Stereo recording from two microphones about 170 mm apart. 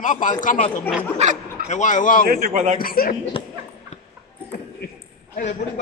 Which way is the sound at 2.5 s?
40° right (ahead or behind).